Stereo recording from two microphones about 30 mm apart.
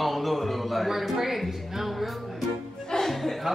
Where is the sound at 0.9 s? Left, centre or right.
Centre.